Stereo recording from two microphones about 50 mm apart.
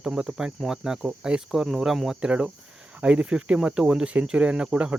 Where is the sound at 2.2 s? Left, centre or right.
Right.